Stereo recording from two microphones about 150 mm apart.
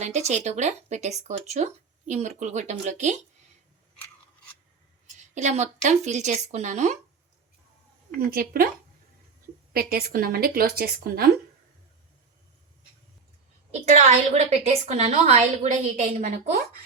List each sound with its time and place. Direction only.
0.0 s speech: 50° right (ahead or behind)
5.3 s speech: 50° right (ahead or behind)
8.3 s speech: 75° right (ahead or behind)
9.7 s a woman's voice: 85° right
13.7 s speech: 50° right (ahead or behind)